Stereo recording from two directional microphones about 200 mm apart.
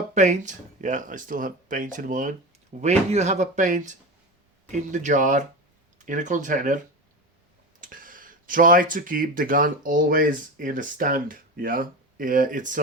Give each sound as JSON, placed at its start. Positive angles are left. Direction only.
{"t": 0.1, "sound": "speech", "side_deg": -35}